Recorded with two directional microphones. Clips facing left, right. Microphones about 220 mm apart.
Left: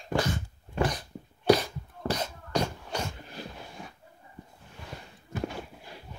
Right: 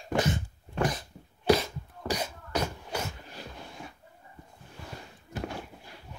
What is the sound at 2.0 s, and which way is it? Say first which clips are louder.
Beatboxing: left 1 dB; 10° right (ahead or behind).